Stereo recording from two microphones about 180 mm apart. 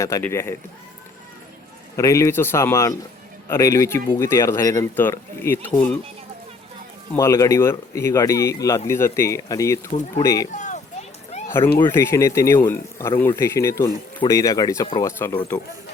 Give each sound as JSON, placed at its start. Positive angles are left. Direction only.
{"t": 0.0, "sound": "speech", "side_deg": 15}
{"t": 2.0, "sound": "speech", "side_deg": 15}
{"t": 7.2, "sound": "speech", "side_deg": 15}
{"t": 10.5, "sound": "speech", "side_deg": 45}
{"t": 11.4, "sound": "speech", "side_deg": 15}